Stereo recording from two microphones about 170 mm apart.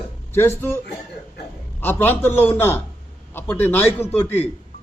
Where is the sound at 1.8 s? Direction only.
10° left (ahead or behind).